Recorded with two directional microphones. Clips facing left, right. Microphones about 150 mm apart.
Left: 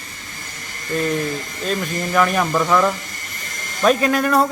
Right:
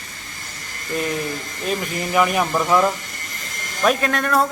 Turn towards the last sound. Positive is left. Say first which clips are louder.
# left 3 dB
turn(degrees=0)  # may be behind; listen again after turning